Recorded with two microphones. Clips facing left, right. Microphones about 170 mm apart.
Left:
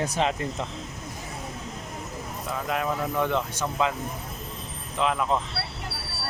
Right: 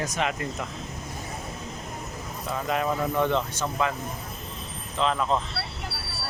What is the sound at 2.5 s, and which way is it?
Speech, centre (ahead or behind).